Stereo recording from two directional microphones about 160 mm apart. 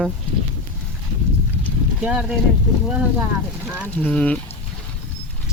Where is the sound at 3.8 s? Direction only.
10° left (ahead or behind).